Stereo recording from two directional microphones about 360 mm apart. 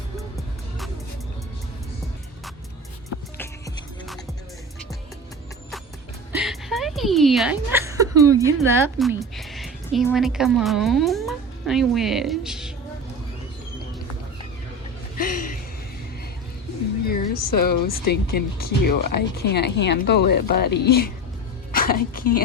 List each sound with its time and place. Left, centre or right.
6.3 s a woman's voice: centre
17.3 s a sound: left
17.9 s speech: left